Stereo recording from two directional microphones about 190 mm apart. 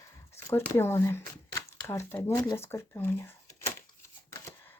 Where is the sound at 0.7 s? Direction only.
15° left (ahead or behind).